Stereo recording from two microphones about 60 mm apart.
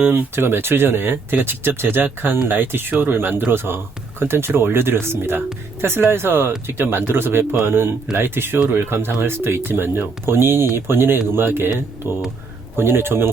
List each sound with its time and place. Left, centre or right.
0.0 s speech: right